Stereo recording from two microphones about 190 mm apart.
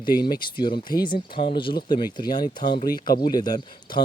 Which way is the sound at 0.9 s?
25° left (ahead or behind).